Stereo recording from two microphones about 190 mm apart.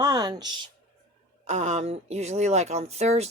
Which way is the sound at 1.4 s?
35° right (ahead or behind).